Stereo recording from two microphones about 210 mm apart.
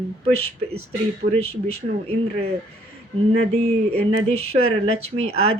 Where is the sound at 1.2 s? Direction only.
40° right (ahead or behind).